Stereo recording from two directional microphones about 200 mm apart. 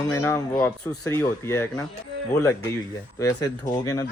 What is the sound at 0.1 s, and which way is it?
Speech, 15° left (ahead or behind).